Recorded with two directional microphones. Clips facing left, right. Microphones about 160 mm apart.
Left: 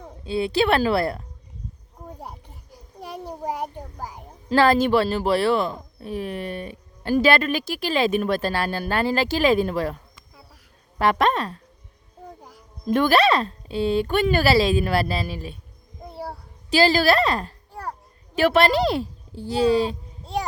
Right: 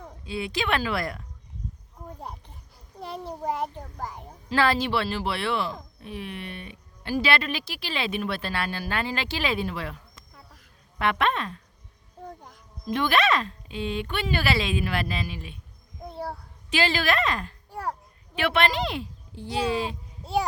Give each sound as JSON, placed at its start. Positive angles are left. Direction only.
{"t": 0.3, "sound": "a woman's voice", "side_deg": 30}
{"t": 3.0, "sound": "a child's voice", "side_deg": 10}
{"t": 4.4, "sound": "a woman's voice", "side_deg": 40}
{"t": 12.4, "sound": "a sound", "side_deg": 5}
{"t": 12.8, "sound": "a woman's voice", "side_deg": 45}
{"t": 16.1, "sound": "child singing", "side_deg": 5}
{"t": 16.6, "sound": "a woman's voice", "side_deg": 35}
{"t": 20.2, "sound": "a sound", "side_deg": 0}